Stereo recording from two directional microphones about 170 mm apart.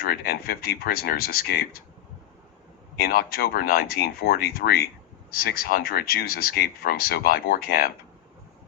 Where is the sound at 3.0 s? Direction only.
65° left (ahead or behind).